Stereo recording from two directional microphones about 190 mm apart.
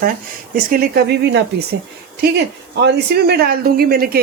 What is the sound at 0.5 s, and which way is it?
Speech, 55° right (ahead or behind).